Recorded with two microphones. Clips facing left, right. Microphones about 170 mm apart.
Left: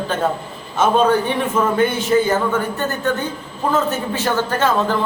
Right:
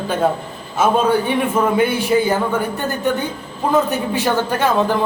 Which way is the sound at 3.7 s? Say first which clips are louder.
Right 3 dB; 15° right (ahead or behind).